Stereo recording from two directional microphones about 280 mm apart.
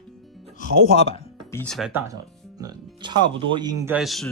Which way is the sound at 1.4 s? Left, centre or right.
Centre.